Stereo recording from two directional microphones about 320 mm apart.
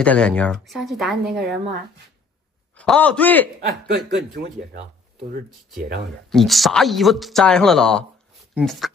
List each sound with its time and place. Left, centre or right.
0.0 s speech: centre
1.3 s a woman's voice: right
2.7 s speech: centre
3.6 s speech: right
6.3 s speech: centre